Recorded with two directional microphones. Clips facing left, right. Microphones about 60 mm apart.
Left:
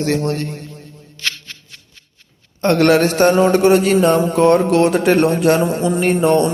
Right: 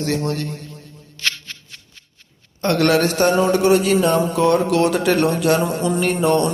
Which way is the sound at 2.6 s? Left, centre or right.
Left.